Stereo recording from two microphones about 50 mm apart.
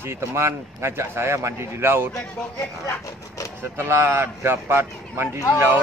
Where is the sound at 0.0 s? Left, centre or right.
Right.